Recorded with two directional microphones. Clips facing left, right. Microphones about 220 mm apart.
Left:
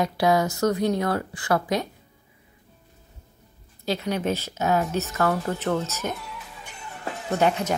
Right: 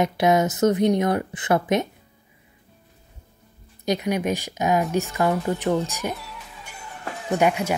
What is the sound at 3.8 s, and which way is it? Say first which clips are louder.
Speech: right 3 dB; 15° right (ahead or behind).